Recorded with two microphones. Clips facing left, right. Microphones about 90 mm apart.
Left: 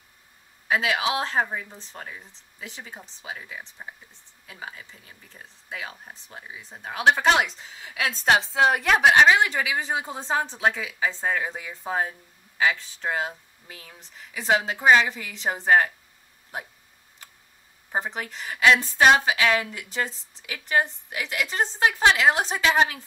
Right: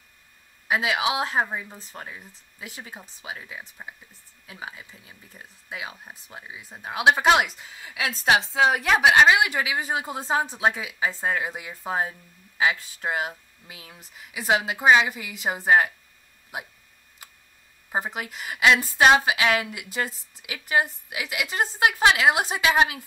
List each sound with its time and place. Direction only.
0.7 s speech: 5° right (ahead or behind)
17.2 s tick: 10° right (ahead or behind)
17.9 s speech: 10° right (ahead or behind)